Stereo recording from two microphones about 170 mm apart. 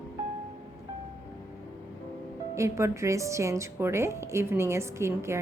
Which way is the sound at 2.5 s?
15° right (ahead or behind).